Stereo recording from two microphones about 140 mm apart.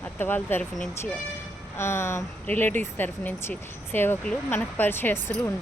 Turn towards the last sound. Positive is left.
turn(degrees=15)  # may be behind; listen again after turning